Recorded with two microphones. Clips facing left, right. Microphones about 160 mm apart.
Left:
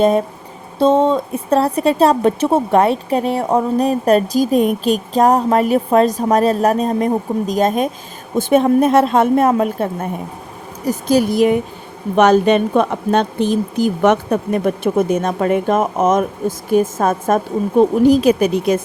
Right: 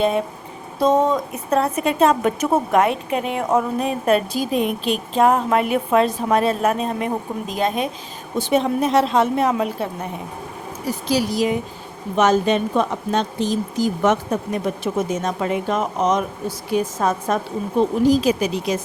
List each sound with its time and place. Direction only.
0.8 s a woman's voice: 25° left (ahead or behind); by 18.8 s 55° left (ahead or behind)